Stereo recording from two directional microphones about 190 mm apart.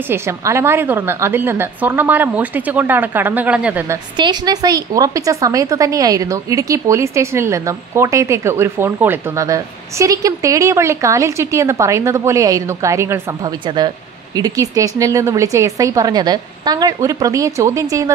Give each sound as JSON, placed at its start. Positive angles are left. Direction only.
{"t": 0.1, "sound": "a woman's voice", "side_deg": -15}
{"t": 4.2, "sound": "a woman's voice", "side_deg": -20}